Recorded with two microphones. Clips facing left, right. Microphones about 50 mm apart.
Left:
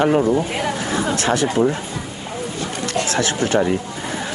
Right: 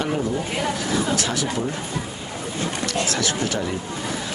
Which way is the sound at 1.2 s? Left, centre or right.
Left.